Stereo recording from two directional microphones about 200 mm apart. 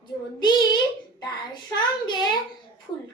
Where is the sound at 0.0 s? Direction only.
20° left (ahead or behind).